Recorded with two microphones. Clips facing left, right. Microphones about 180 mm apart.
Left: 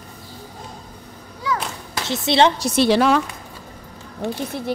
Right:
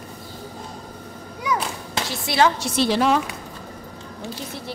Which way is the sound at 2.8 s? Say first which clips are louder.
Left 3 dB; 75° left (ahead or behind).